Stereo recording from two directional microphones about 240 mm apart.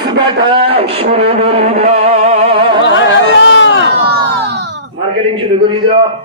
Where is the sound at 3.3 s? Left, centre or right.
Left.